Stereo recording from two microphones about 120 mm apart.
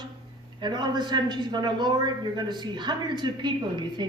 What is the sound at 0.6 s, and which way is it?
A man's voice, 40° right (ahead or behind).